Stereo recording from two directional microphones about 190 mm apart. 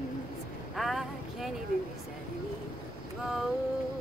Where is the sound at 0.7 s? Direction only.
Centre (ahead or behind).